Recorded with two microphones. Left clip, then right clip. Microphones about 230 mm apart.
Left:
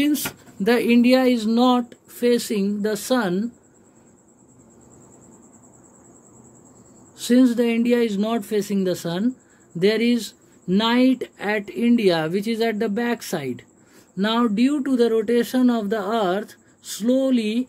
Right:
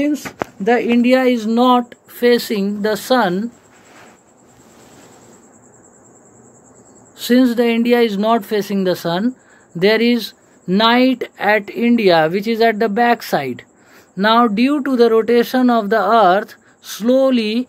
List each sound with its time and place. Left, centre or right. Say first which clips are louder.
0.7 s speech: right 3 dB; left
1.0 s speech: right 4 dB; centre
7.2 s speech: right 4 dB; centre